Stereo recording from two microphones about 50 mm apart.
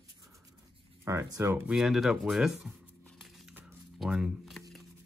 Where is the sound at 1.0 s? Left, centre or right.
Right.